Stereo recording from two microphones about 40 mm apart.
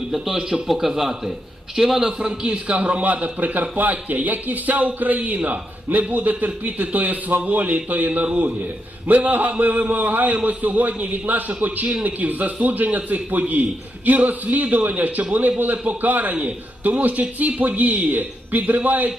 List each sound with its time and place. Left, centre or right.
0.1 s a man's voice: centre; by 19.1 s right